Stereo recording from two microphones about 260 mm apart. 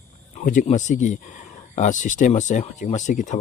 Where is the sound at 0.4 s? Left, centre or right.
Left.